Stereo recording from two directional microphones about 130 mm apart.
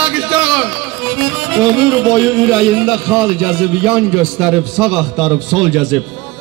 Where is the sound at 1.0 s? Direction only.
5° left (ahead or behind).